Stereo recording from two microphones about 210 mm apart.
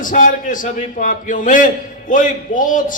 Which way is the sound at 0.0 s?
40° left (ahead or behind).